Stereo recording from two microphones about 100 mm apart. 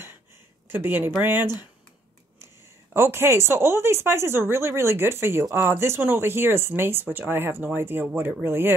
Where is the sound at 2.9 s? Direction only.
25° right (ahead or behind).